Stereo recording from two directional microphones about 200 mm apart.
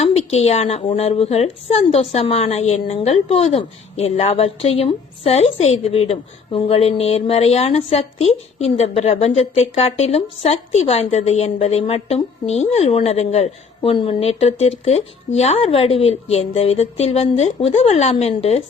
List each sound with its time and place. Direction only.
0.0 s a woman's voice: 30° left (ahead or behind)